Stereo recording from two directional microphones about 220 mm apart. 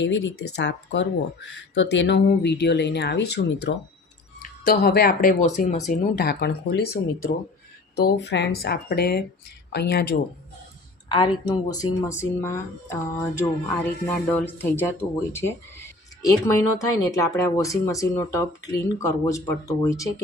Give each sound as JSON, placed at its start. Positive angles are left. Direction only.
{"t": 0.0, "sound": "speech", "side_deg": 55}
{"t": 11.1, "sound": "speech", "side_deg": 20}